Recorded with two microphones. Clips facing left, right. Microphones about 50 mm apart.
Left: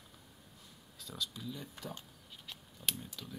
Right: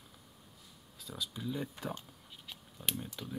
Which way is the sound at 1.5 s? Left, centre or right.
Right.